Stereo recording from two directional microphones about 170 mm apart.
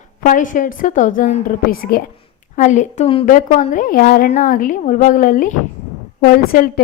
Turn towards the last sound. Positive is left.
turn(degrees=60)  # may be behind; listen again after turning